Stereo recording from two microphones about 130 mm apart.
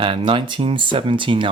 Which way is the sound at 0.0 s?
40° right (ahead or behind).